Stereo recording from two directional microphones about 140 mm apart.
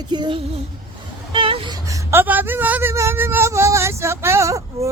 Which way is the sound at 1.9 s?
15° right (ahead or behind).